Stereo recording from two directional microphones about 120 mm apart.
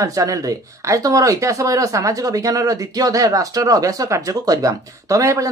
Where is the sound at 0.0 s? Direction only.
30° right (ahead or behind).